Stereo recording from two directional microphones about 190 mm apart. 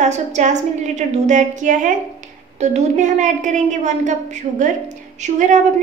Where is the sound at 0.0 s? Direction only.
40° right (ahead or behind).